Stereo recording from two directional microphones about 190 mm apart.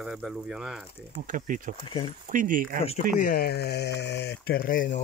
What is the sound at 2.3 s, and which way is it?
Speech, 45° right (ahead or behind).